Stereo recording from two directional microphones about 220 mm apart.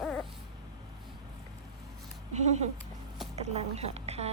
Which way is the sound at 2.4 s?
30° right (ahead or behind).